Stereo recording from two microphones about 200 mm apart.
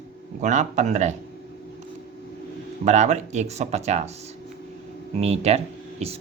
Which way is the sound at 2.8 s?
35° right (ahead or behind).